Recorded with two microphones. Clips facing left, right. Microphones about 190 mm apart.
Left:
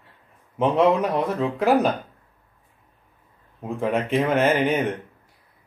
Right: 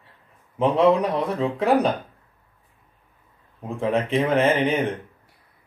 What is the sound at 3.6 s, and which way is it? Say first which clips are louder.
Speech: right 1 dB; centre (ahead or behind).